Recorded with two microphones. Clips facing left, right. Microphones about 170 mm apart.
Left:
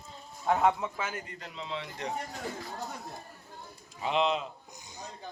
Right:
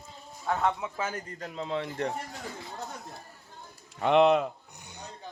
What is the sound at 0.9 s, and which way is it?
A man's voice, 40° right (ahead or behind).